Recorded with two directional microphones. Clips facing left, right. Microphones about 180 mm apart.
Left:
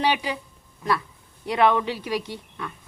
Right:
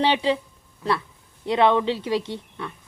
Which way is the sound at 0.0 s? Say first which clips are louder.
Right 4 dB; 25° right (ahead or behind).